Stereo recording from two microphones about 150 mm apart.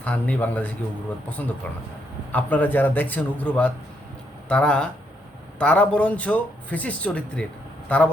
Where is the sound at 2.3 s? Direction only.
10° left (ahead or behind).